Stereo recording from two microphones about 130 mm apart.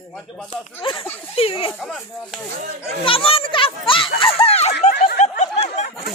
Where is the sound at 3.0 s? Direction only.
45° left (ahead or behind); by 5.9 s 65° left (ahead or behind).